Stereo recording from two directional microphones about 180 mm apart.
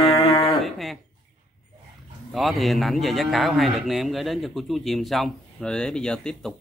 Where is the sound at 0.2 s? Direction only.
30° left (ahead or behind).